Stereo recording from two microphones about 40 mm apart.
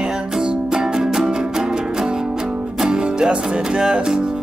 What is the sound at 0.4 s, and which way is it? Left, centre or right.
Music, centre.